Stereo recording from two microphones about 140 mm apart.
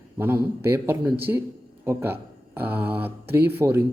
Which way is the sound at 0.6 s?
15° right (ahead or behind).